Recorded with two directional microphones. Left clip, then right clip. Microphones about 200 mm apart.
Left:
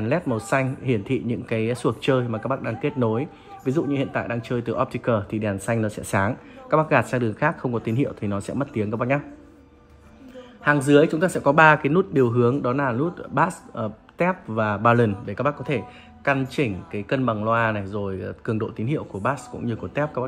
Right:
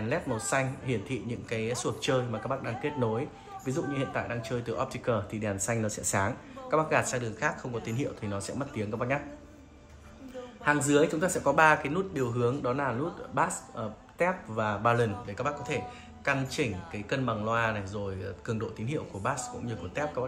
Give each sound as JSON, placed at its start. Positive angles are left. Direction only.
{"t": 0.0, "sound": "speech", "side_deg": 30}
{"t": 10.6, "sound": "speech", "side_deg": 35}